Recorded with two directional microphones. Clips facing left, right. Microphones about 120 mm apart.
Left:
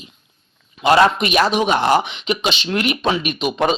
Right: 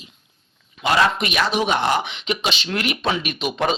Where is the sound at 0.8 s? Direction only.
25° left (ahead or behind).